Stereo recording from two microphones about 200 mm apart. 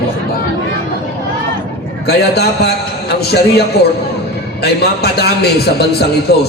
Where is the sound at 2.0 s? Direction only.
55° left (ahead or behind).